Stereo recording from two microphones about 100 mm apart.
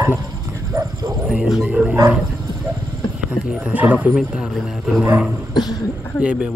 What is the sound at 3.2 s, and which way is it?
A man's voice, 10° right (ahead or behind).